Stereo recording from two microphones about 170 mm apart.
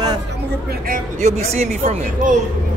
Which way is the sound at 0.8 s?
55° right (ahead or behind).